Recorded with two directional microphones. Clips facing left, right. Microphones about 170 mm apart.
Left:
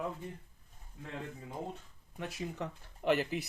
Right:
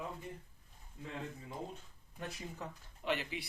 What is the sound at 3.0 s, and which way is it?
Speech, 45° left (ahead or behind).